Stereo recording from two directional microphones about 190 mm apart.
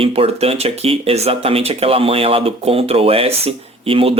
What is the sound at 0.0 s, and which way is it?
Speech, 30° right (ahead or behind).